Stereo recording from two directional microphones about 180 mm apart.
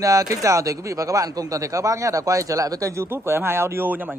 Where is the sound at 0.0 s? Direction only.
20° right (ahead or behind).